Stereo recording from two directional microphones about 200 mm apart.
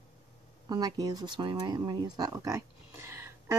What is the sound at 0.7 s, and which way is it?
Speech, 20° right (ahead or behind).